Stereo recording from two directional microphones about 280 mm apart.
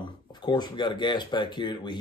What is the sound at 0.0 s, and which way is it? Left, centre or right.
A man's voice, centre.